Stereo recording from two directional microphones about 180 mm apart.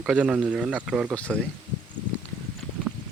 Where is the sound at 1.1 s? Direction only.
5° left (ahead or behind).